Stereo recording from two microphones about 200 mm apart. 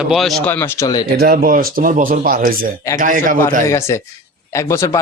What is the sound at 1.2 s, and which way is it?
A man's voice, 45° right (ahead or behind).